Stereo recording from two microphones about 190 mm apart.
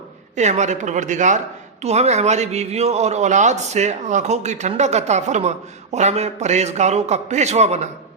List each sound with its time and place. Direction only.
0.3 s a man's voice: 40° right (ahead or behind)